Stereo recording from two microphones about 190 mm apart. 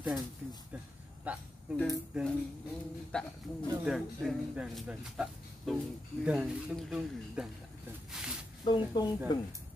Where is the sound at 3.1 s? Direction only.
5° left (ahead or behind).